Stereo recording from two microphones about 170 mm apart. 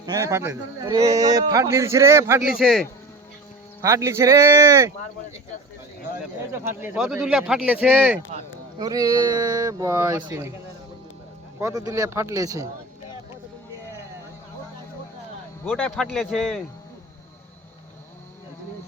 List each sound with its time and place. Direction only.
0.0 s speech: 20° right (ahead or behind)
2.6 s speech: centre (ahead or behind)
3.8 s speech: 20° right (ahead or behind)
6.9 s speech: 5° right (ahead or behind)
8.8 s speech: 20° right (ahead or behind)
11.6 s speech: 20° right (ahead or behind)
15.6 s speech: 5° left (ahead or behind)